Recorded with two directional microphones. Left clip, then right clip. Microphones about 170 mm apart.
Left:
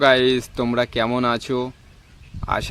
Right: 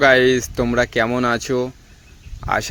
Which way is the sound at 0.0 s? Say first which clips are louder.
Right 3 dB; 15° right (ahead or behind).